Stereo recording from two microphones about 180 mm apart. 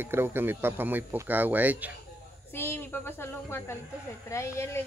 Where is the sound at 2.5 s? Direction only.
10° left (ahead or behind).